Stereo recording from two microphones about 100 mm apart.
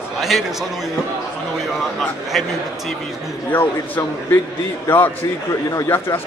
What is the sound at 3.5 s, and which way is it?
A man's voice, 20° left (ahead or behind).